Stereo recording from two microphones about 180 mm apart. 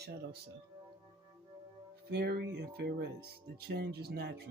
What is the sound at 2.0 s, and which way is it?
Speech, 65° right (ahead or behind).